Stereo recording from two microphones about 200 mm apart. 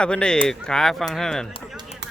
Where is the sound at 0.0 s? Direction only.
5° left (ahead or behind).